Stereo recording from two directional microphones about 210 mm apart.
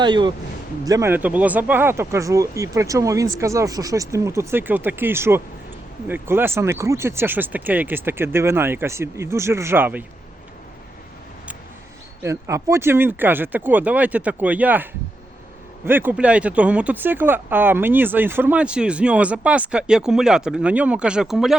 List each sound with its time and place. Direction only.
0.0 s speech: 20° right (ahead or behind)
12.2 s speech: 15° right (ahead or behind)
15.9 s speech: 10° right (ahead or behind)